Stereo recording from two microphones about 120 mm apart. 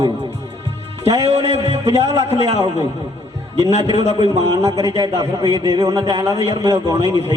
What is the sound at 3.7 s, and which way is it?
Speech, 60° right (ahead or behind).